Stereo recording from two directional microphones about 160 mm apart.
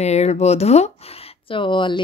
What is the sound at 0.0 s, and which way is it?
Speech, 45° left (ahead or behind).